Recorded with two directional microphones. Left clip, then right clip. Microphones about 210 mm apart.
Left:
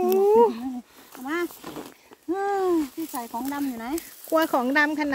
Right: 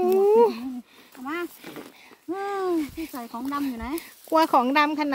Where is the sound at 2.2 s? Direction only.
20° right (ahead or behind).